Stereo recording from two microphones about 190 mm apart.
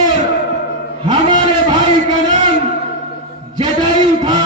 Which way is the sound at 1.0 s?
25° right (ahead or behind).